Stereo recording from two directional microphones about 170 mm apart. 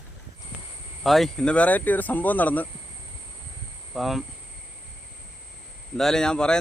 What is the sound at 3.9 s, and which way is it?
Speech, centre (ahead or behind).